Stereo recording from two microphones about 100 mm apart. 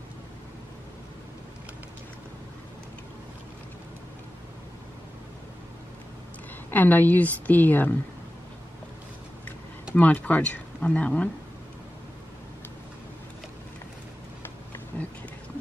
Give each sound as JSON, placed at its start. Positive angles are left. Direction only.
{"t": 6.7, "sound": "speech", "side_deg": 15}
{"t": 9.9, "sound": "speech", "side_deg": 15}